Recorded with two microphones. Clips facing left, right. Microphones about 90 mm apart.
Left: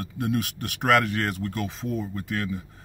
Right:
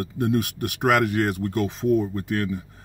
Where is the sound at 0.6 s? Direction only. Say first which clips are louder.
Even; 15° right (ahead or behind).